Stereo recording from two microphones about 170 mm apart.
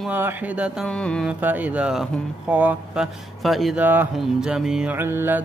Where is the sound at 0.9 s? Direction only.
5° left (ahead or behind).